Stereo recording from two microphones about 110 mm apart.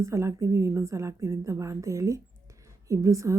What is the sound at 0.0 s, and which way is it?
A woman's voice, 25° right (ahead or behind).